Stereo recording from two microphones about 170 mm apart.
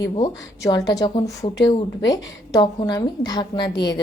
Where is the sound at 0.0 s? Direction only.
25° left (ahead or behind).